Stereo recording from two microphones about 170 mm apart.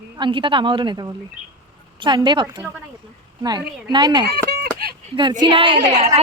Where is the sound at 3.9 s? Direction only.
25° right (ahead or behind).